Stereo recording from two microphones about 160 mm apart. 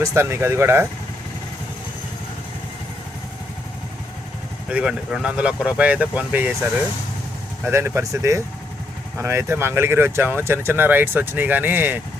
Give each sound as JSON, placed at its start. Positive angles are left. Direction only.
{"t": 0.0, "sound": "speech", "side_deg": -15}
{"t": 4.7, "sound": "speech", "side_deg": -5}
{"t": 7.6, "sound": "speech", "side_deg": -15}